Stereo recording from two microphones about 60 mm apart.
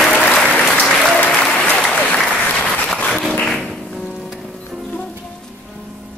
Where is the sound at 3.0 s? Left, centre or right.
Centre.